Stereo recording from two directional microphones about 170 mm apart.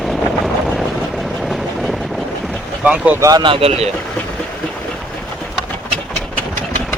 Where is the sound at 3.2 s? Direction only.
25° right (ahead or behind).